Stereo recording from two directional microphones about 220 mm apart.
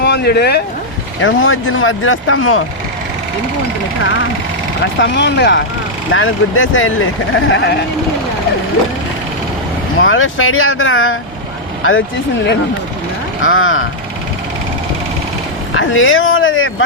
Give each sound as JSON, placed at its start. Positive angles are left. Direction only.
{"t": 0.0, "sound": "speech", "side_deg": 45}
{"t": 1.2, "sound": "speech", "side_deg": 65}
{"t": 4.8, "sound": "speech", "side_deg": 55}
{"t": 6.1, "sound": "speech", "side_deg": 65}
{"t": 10.0, "sound": "speech", "side_deg": 65}
{"t": 13.4, "sound": "speech", "side_deg": 65}
{"t": 15.8, "sound": "speech", "side_deg": 60}